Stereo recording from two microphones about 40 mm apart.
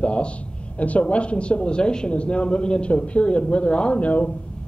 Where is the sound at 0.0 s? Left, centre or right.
Left.